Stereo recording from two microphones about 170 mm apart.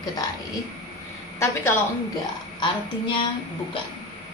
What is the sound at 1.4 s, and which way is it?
Speech, 15° left (ahead or behind).